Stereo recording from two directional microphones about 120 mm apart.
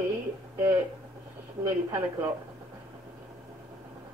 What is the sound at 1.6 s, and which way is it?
Speech, 20° right (ahead or behind).